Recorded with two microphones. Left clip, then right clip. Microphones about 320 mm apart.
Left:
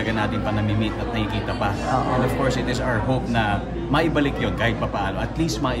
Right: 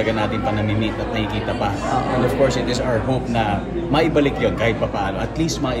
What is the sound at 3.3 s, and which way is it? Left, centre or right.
A man's voice, centre.